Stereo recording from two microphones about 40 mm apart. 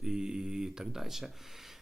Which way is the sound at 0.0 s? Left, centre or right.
Centre.